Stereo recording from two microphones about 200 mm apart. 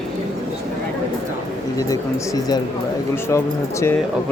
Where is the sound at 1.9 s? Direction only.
20° left (ahead or behind).